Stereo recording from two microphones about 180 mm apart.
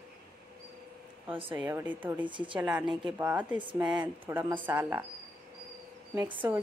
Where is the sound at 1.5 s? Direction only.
10° right (ahead or behind).